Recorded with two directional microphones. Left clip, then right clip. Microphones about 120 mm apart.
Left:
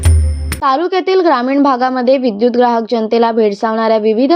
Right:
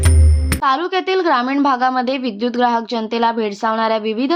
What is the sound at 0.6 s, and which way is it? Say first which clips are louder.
A woman's voice: left 4 dB; 25° left (ahead or behind).